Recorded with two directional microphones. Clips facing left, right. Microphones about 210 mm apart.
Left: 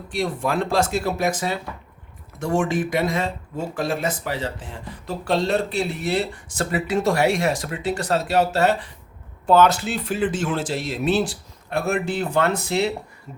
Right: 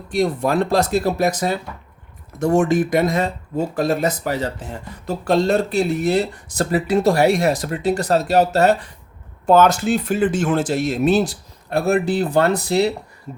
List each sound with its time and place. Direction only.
0.1 s speech: 40° right (ahead or behind)